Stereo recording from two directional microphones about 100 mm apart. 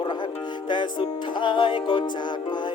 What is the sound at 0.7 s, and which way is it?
Music, 50° left (ahead or behind).